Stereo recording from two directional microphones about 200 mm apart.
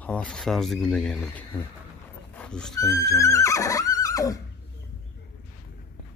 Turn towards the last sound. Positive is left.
turn(degrees=15)  # may be behind; listen again after turning